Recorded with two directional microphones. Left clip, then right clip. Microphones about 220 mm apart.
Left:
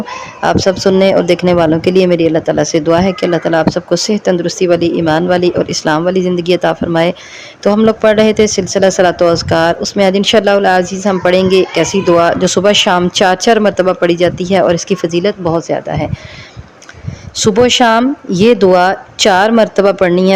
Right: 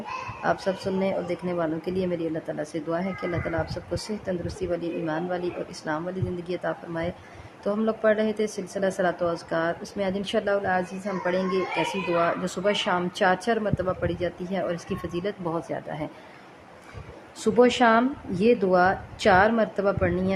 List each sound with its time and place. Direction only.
0.4 s speech: 35° left (ahead or behind)
17.4 s speech: 35° left (ahead or behind)